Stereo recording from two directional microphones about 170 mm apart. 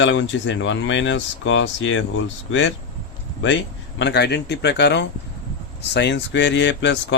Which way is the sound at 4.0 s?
90° left.